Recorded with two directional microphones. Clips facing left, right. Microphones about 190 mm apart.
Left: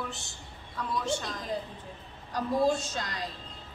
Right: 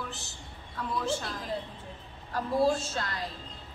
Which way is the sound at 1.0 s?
5° right (ahead or behind).